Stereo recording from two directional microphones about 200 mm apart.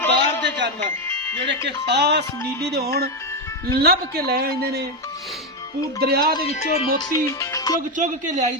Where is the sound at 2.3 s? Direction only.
10° left (ahead or behind).